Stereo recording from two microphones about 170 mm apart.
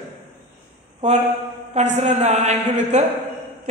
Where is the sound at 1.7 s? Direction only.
40° right (ahead or behind).